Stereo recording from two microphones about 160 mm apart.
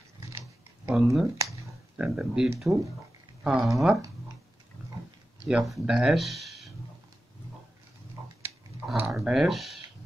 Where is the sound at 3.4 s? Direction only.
5° right (ahead or behind).